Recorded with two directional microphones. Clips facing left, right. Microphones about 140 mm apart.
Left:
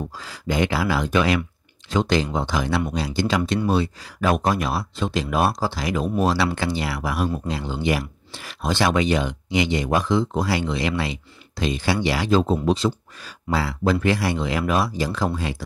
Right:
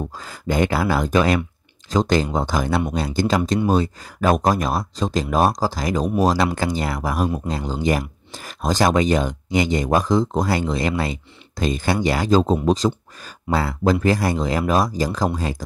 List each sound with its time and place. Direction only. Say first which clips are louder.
0.1 s speech: right 2 dB; 45° right (ahead or behind)